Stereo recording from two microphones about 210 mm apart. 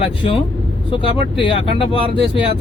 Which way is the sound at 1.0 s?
25° left (ahead or behind).